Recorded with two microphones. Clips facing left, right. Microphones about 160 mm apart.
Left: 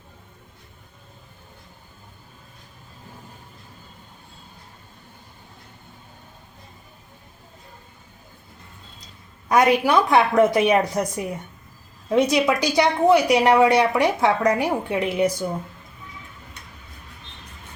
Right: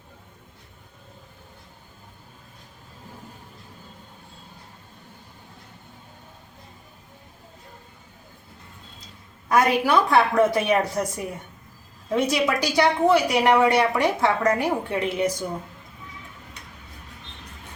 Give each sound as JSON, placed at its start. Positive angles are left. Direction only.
{"t": 9.5, "sound": "a woman's voice", "side_deg": 20}
{"t": 12.1, "sound": "a woman's voice", "side_deg": 20}